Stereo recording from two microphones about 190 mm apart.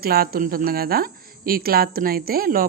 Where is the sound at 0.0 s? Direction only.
50° right (ahead or behind).